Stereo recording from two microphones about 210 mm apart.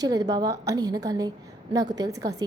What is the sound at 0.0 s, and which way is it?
A woman's voice, 15° right (ahead or behind).